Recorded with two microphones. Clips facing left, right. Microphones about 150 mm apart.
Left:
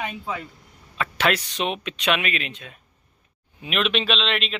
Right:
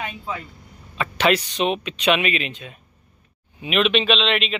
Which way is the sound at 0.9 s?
Centre (ahead or behind).